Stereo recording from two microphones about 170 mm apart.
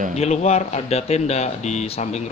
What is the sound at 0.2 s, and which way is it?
Speech, 40° left (ahead or behind).